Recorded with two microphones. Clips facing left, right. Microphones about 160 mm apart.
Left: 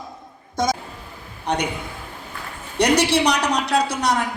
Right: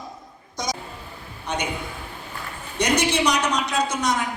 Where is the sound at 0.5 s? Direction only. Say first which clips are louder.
Left 7 dB; 50° left (ahead or behind).